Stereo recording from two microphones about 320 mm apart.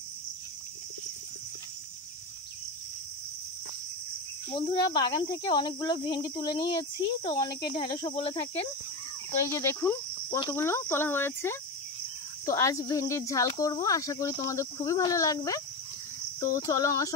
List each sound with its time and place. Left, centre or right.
4.6 s speech: centre
9.5 s speech: centre